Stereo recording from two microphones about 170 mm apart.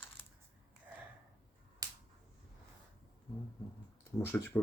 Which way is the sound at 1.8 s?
20° right (ahead or behind).